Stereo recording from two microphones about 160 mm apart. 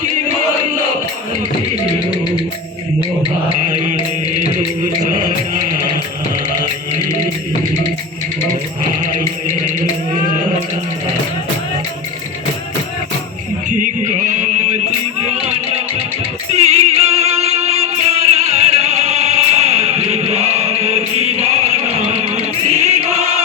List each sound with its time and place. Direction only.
3.7 s music: 50° right (ahead or behind)
13.7 s music: 50° right (ahead or behind)